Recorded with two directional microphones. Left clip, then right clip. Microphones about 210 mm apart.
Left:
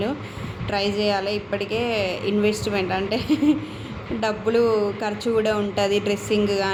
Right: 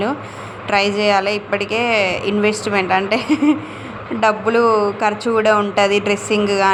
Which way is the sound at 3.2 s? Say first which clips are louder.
Right 5 dB; 35° right (ahead or behind).